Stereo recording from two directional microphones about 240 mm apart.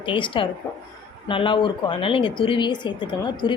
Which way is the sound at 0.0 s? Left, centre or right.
Left.